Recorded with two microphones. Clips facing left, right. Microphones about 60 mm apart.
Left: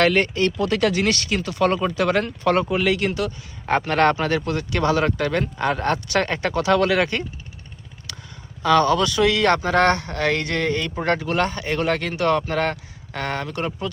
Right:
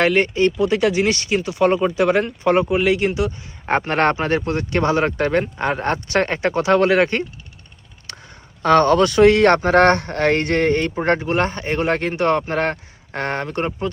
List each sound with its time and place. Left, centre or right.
0.0 s speech: centre
3.7 s speech: right
8.1 s a sound: right
8.6 s speech: right
11.0 s speech: right